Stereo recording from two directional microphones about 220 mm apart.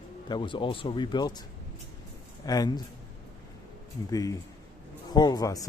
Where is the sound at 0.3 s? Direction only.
20° left (ahead or behind).